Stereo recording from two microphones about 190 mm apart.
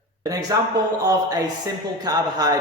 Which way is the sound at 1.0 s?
20° right (ahead or behind).